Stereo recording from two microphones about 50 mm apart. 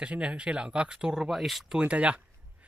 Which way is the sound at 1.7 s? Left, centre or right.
Right.